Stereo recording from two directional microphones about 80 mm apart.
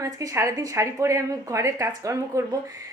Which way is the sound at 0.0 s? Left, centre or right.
Right.